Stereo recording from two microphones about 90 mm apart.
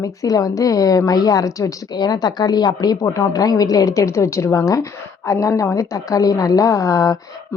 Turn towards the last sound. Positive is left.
turn(degrees=40)  # may be behind; listen again after turning